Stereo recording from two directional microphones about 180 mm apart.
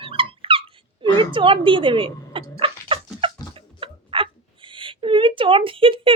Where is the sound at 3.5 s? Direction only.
30° right (ahead or behind).